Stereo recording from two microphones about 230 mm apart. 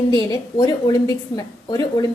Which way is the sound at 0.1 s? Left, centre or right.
Centre.